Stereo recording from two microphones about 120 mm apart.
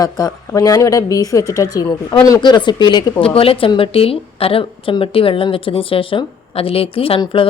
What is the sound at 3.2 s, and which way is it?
A woman's voice, 50° left (ahead or behind).